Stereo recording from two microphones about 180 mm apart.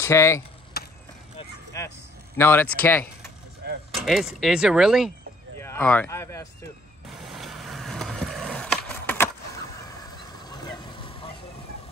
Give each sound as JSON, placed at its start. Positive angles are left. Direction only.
{"t": 0.0, "sound": "speech", "side_deg": 15}
{"t": 0.8, "sound": "skateboard", "side_deg": 60}
{"t": 1.7, "sound": "speech", "side_deg": 15}
{"t": 4.0, "sound": "speech", "side_deg": 0}
{"t": 5.6, "sound": "speech", "side_deg": 15}
{"t": 7.1, "sound": "vehicle", "side_deg": 0}
{"t": 10.4, "sound": "vehicle", "side_deg": 20}